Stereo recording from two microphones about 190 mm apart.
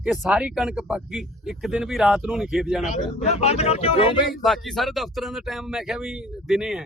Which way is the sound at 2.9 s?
35° left (ahead or behind).